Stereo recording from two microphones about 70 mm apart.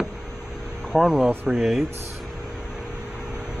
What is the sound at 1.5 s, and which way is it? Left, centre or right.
Speech, centre.